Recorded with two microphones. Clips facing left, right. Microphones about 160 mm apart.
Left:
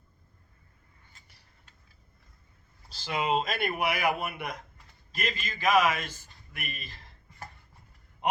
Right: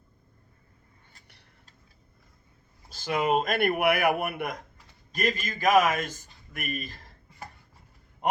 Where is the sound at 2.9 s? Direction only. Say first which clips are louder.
Right 3 dB; 50° right (ahead or behind).